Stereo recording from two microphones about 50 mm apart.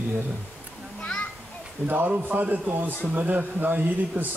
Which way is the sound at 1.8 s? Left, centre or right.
Right.